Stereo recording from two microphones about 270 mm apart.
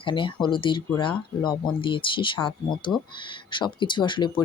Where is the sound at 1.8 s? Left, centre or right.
Centre.